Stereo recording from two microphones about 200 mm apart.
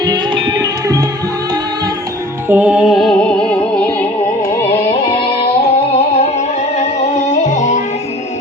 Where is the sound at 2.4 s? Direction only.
10° right (ahead or behind); by 4.6 s 10° left (ahead or behind).